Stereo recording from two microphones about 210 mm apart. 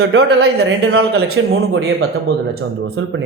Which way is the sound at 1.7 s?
50° right (ahead or behind).